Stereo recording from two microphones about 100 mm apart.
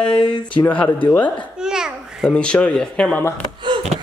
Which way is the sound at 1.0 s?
15° left (ahead or behind).